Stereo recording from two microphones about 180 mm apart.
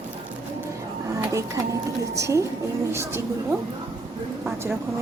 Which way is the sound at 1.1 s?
15° right (ahead or behind).